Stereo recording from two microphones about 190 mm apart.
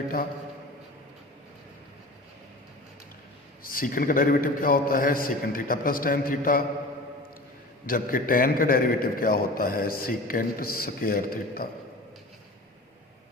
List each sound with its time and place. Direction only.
3.6 s a man's voice: 50° left (ahead or behind)
7.9 s a man's voice: 50° left (ahead or behind)